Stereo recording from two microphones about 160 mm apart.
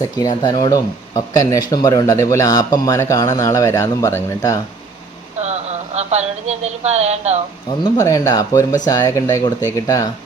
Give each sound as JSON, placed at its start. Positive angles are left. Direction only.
{"t": 0.4, "sound": "speech", "side_deg": 25}
{"t": 5.4, "sound": "speech", "side_deg": -45}
{"t": 7.9, "sound": "speech", "side_deg": 20}